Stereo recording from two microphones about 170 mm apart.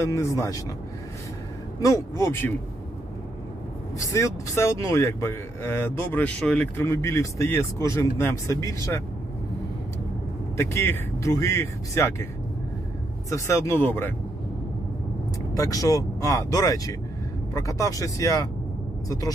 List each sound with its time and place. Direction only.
0.0 s speech: 15° left (ahead or behind)
1.8 s speech: 20° left (ahead or behind)
4.0 s speech: 20° left (ahead or behind)
10.6 s speech: 15° left (ahead or behind)
13.3 s speech: 15° left (ahead or behind)
15.5 s speech: 20° left (ahead or behind)